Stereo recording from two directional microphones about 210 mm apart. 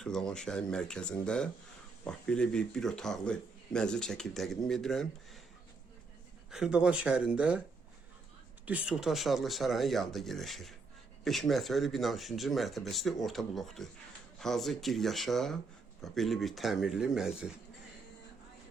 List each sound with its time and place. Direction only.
0.0 s speech: 5° left (ahead or behind)
6.5 s speech: 5° right (ahead or behind)
8.6 s speech: 5° right (ahead or behind)